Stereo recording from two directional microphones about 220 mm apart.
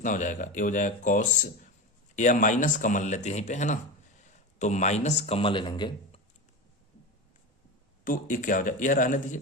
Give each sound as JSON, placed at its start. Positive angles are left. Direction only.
{"t": 0.0, "sound": "speech", "side_deg": 35}
{"t": 8.0, "sound": "speech", "side_deg": 35}